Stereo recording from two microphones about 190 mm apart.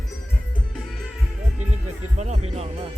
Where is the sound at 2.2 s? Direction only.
35° right (ahead or behind).